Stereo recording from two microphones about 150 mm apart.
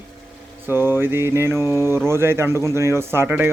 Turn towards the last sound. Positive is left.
turn(degrees=-15)  # may be behind; listen again after turning